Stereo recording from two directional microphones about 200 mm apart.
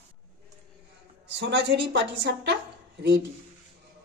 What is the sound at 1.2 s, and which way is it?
A woman's voice, 60° right (ahead or behind).